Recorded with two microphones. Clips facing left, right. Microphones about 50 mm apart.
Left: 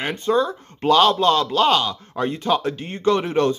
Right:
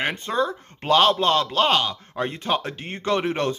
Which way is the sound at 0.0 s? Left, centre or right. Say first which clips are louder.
Left 3 dB; right.